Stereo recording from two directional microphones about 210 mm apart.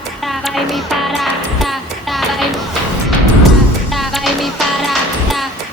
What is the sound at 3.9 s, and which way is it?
Music, centre (ahead or behind).